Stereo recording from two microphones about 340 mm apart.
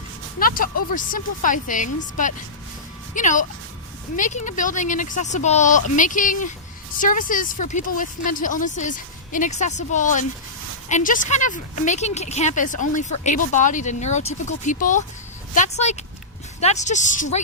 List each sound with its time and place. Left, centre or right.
0.3 s a woman's voice: left